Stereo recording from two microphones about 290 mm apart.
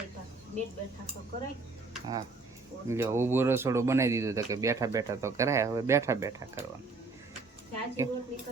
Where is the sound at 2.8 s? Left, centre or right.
Centre.